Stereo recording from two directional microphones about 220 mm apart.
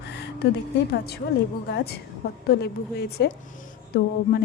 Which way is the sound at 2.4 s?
50° left (ahead or behind).